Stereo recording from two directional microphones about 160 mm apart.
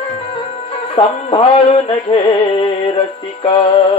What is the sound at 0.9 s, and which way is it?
Music, 35° left (ahead or behind).